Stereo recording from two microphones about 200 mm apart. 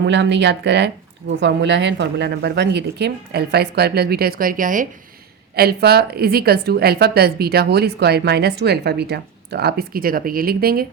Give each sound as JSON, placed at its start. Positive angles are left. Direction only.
{"t": 0.0, "sound": "a woman's voice", "side_deg": -60}